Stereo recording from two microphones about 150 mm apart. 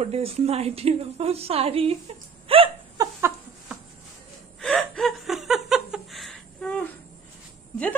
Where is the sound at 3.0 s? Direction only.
20° right (ahead or behind).